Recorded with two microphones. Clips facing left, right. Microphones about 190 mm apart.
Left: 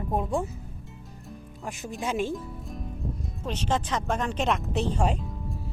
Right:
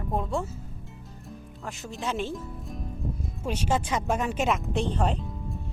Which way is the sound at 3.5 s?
10° right (ahead or behind).